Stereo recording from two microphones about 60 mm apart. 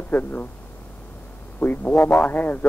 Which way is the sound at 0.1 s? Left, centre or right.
Left.